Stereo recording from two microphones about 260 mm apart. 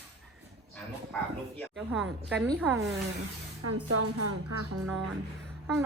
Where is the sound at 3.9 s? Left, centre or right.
Right.